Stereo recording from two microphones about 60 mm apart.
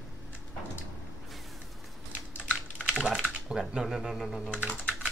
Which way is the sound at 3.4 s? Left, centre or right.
Centre.